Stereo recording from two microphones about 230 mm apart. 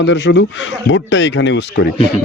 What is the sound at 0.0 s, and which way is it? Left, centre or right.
A man's voice, left.